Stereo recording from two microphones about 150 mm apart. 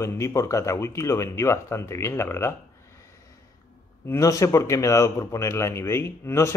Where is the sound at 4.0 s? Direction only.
20° left (ahead or behind).